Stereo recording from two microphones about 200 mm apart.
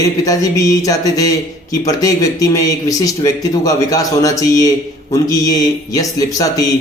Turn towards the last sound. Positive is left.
turn(degrees=15)  # may be behind; listen again after turning